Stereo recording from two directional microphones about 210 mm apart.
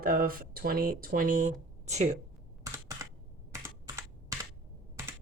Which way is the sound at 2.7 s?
15° right (ahead or behind).